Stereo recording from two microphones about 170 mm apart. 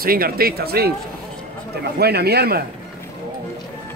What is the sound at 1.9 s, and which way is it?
Speech, 70° right (ahead or behind).